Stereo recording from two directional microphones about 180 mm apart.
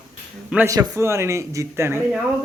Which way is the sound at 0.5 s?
10° right (ahead or behind).